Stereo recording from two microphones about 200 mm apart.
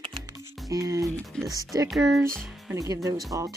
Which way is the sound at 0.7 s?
15° right (ahead or behind).